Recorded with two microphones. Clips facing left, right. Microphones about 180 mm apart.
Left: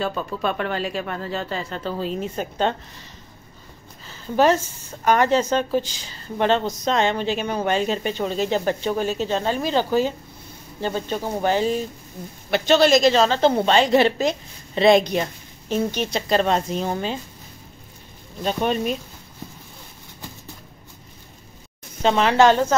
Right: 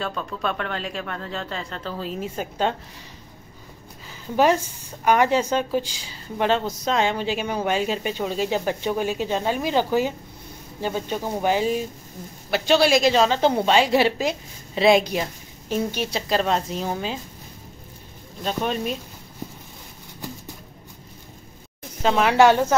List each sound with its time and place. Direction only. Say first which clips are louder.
0.0 s speech: left 3 dB; 5° left (ahead or behind)
4.1 s a woman's voice: left 1 dB; 10° right (ahead or behind)
18.4 s speech: left 3 dB; 5° left (ahead or behind)
22.0 s a woman's voice: even; 10° right (ahead or behind)